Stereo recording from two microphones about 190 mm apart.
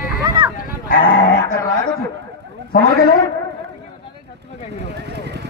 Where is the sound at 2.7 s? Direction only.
50° left (ahead or behind).